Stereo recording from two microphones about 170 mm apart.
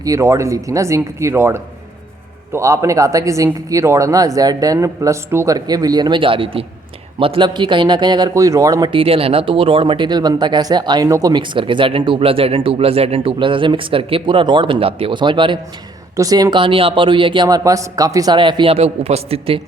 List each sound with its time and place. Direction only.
0.0 s a man's voice: 20° right (ahead or behind); by 19.6 s 35° right (ahead or behind)